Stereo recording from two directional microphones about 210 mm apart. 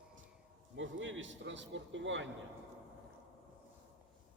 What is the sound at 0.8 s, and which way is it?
A man's voice, 65° right (ahead or behind).